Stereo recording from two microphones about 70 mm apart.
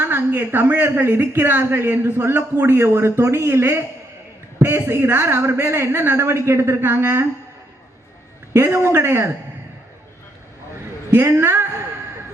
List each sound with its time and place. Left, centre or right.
0.0 s speech: right
8.5 s speech: right
11.1 s speech: right